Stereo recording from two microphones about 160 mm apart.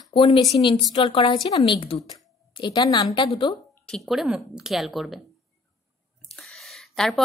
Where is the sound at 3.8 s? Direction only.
Centre (ahead or behind).